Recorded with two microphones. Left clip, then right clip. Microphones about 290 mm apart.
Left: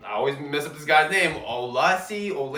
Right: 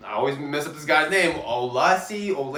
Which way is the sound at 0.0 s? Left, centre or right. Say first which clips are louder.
Right 1 dB; centre.